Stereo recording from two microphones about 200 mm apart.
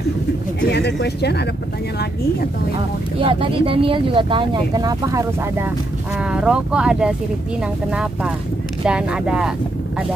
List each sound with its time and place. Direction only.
0.6 s speech: 55° left (ahead or behind)
3.2 s speech: 25° right (ahead or behind); by 9.5 s 5° right (ahead or behind)